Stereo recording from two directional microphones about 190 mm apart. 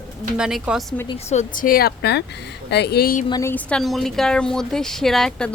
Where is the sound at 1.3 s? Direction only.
40° left (ahead or behind).